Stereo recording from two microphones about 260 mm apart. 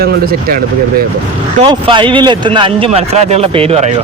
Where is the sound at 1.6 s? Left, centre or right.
Centre.